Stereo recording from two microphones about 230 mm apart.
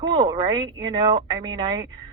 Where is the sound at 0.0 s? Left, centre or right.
Centre.